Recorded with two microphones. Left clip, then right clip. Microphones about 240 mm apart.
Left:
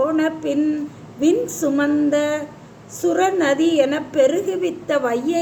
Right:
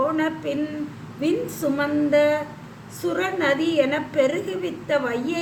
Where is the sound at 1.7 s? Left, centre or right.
Centre.